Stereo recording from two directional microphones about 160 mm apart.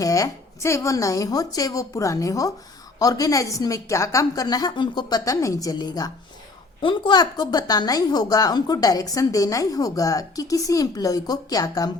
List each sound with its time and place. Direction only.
0.0 s a woman's voice: 20° left (ahead or behind)